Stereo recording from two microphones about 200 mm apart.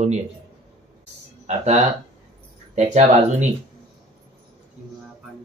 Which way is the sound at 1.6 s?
35° right (ahead or behind).